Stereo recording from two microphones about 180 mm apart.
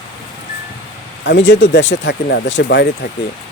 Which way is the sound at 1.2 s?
85° left.